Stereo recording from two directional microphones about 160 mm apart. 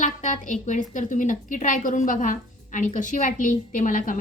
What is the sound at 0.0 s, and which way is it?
A woman's voice, 50° left (ahead or behind).